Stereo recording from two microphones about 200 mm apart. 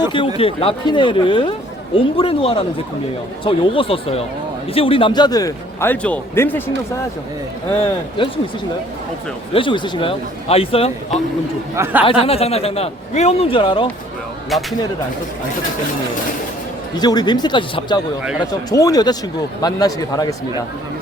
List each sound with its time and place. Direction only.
0.0 s a man's voice: 25° left (ahead or behind)
9.5 s speech: 25° left (ahead or behind)
11.7 s speech: 10° right (ahead or behind)
12.0 s speech: 30° left (ahead or behind)
14.5 s speech: centre (ahead or behind)
16.9 s a man's voice: 20° left (ahead or behind)